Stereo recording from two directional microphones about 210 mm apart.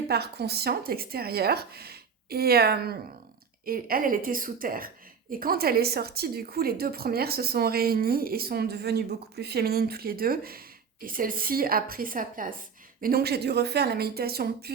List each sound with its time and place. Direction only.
0.1 s a woman's voice: 50° right (ahead or behind)